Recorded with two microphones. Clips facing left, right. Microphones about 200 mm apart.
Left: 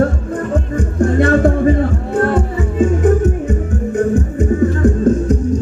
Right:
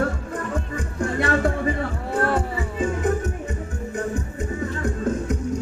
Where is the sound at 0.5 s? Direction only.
45° left (ahead or behind).